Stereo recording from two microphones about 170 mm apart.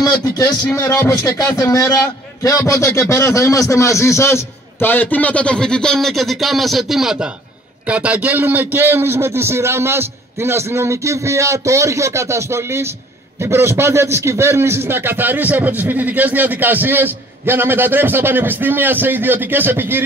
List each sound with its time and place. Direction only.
0.0 s a man's voice: 20° left (ahead or behind); by 20.0 s 10° right (ahead or behind)